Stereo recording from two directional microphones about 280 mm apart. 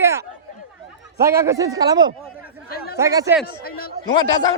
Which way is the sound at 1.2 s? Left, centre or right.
Centre.